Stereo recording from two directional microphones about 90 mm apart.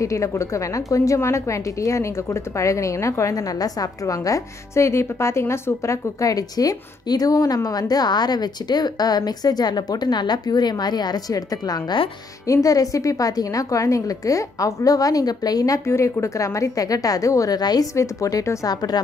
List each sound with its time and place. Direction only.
0.0 s a woman's voice: 35° left (ahead or behind)
17.9 s a woman's voice: 35° left (ahead or behind)
18.7 s a woman's voice: 45° left (ahead or behind)